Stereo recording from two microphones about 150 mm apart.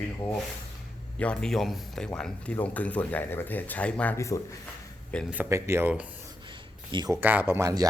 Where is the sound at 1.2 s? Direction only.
5° left (ahead or behind).